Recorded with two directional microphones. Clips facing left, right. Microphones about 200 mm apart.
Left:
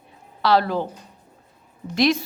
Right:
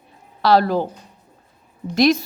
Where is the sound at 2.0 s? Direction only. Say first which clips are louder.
Right 4 dB; 40° right (ahead or behind).